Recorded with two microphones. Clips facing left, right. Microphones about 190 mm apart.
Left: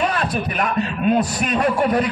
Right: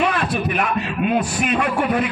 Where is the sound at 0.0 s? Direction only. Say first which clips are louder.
Right 1 dB; 40° left (ahead or behind).